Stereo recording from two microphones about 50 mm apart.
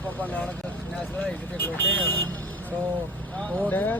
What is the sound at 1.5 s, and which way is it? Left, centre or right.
Speech, left.